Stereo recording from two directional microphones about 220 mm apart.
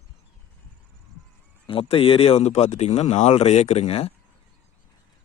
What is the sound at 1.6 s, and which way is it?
Speech, 25° left (ahead or behind).